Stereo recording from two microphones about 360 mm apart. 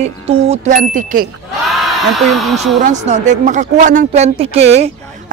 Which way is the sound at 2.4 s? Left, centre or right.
Centre.